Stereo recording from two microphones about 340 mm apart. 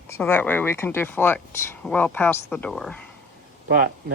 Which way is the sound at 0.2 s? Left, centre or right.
Centre.